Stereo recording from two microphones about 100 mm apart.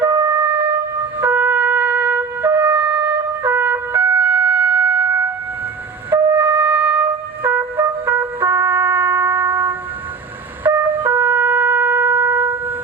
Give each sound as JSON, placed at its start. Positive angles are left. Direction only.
{"t": 0.0, "sound": "music", "side_deg": -20}
{"t": 1.2, "sound": "wind instrument", "side_deg": -20}
{"t": 6.1, "sound": "shofar", "side_deg": -25}
{"t": 7.4, "sound": "trumpet", "side_deg": -20}
{"t": 10.6, "sound": "shofar", "side_deg": -20}